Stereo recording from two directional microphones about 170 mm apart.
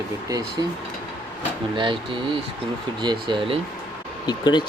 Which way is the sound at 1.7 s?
30° right (ahead or behind).